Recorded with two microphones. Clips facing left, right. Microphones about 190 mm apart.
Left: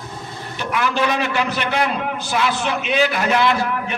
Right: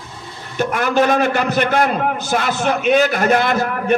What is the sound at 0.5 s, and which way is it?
A man's voice, 50° right (ahead or behind).